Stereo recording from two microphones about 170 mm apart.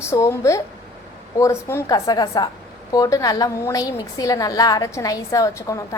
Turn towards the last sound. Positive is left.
turn(degrees=20)  # may be behind; listen again after turning